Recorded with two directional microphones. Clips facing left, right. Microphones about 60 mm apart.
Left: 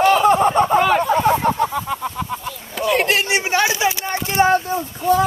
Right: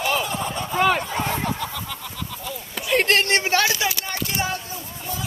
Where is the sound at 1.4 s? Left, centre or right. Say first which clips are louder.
Left 9 dB; left.